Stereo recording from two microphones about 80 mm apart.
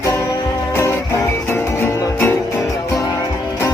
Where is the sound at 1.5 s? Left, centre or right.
Left.